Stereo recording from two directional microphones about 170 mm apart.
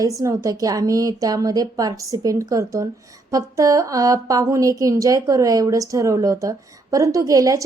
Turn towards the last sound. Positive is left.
turn(degrees=-20)  # may be behind; listen again after turning